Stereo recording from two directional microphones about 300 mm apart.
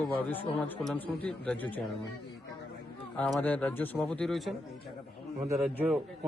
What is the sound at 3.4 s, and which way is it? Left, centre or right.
A man's voice, centre.